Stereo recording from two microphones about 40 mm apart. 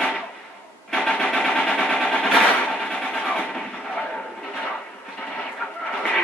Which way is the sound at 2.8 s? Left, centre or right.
Centre.